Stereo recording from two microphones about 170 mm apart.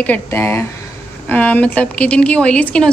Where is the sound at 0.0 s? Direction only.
10° left (ahead or behind).